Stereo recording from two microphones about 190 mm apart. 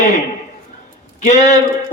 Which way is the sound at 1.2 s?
35° left (ahead or behind).